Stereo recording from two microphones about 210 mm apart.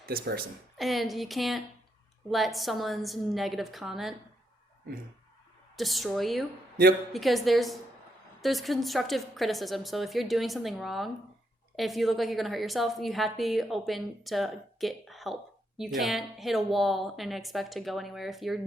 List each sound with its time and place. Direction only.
0.1 s a woman's voice: 45° right (ahead or behind)
0.8 s a woman's voice: centre (ahead or behind)
5.7 s a woman's voice: centre (ahead or behind)